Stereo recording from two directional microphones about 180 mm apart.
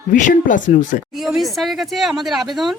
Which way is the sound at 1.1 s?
Centre (ahead or behind).